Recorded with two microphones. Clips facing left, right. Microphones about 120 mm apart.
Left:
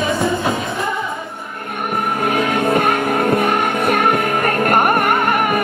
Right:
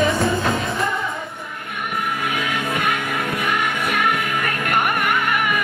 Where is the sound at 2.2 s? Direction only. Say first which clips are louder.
Left 8 dB; 45° left (ahead or behind).